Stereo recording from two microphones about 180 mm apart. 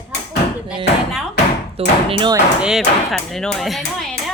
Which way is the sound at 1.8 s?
30° right (ahead or behind).